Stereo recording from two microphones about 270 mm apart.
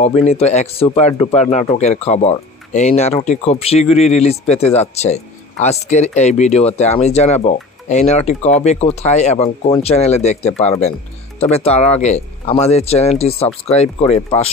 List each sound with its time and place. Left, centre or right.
0.0 s speech: left